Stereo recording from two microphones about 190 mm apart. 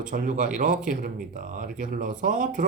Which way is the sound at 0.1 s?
45° right (ahead or behind).